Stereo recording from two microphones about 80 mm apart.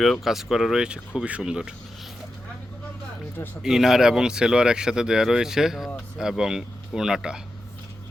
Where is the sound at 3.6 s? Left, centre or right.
Centre.